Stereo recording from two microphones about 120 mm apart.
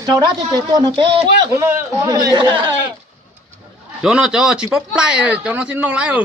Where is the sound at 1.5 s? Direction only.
20° right (ahead or behind).